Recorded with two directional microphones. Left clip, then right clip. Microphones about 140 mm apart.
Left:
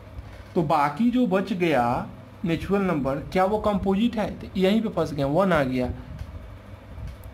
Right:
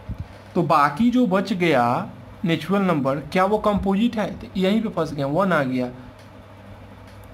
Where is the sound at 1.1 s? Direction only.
25° right (ahead or behind).